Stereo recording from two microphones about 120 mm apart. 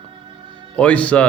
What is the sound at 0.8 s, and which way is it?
Speech, 10° left (ahead or behind).